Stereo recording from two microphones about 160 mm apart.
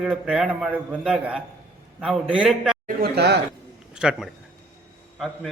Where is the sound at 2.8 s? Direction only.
80° right.